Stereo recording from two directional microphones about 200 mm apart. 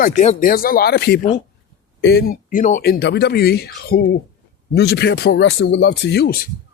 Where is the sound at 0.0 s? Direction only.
40° left (ahead or behind).